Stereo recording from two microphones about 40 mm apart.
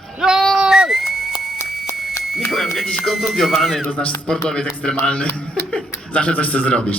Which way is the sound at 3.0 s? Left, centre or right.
Centre.